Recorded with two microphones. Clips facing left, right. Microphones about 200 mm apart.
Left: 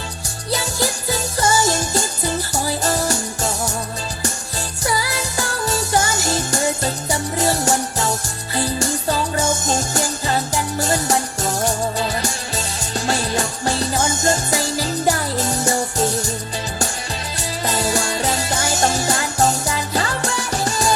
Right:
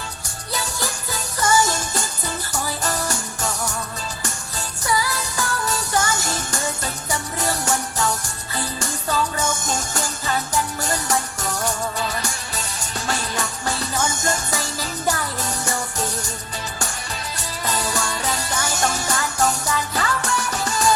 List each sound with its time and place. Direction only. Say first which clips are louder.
1.4 s music: left 1 dB; 25° left (ahead or behind)
4.9 s music: even; 30° left (ahead or behind)
17.7 s music: left 4 dB; 25° left (ahead or behind)